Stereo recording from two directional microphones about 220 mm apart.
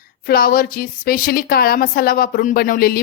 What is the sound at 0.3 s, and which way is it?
Speech, 40° left (ahead or behind).